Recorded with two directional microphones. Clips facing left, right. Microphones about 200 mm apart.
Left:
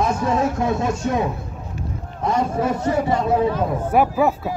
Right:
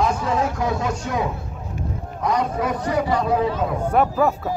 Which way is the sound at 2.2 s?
25° left (ahead or behind).